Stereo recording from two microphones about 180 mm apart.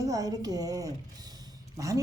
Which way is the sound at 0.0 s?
20° right (ahead or behind).